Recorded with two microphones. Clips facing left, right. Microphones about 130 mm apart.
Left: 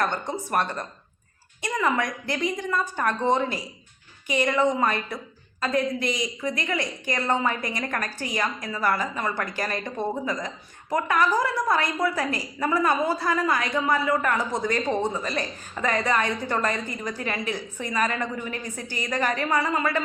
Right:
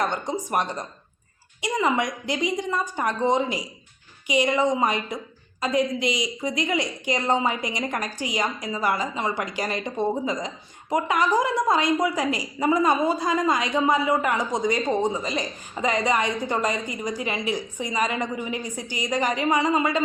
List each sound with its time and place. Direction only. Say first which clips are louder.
0.0 s a woman's voice: right 1 dB; 15° right (ahead or behind)